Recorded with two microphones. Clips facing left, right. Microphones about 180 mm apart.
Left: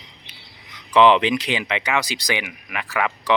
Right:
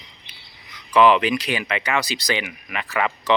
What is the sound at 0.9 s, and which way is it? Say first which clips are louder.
Speech: left 1 dB; 20° left (ahead or behind).